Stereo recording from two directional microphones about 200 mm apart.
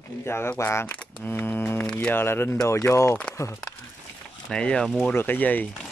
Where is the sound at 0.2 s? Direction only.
10° left (ahead or behind).